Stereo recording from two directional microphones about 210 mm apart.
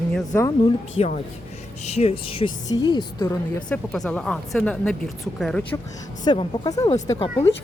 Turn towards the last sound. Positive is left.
turn(degrees=15)  # may be behind; listen again after turning